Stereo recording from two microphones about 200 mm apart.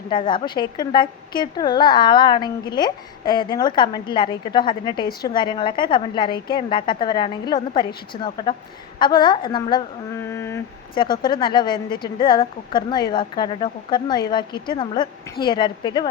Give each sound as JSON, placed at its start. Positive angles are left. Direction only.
{"t": 0.1, "sound": "a woman's voice", "side_deg": 25}